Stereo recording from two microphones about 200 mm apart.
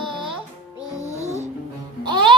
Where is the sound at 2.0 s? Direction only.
20° right (ahead or behind).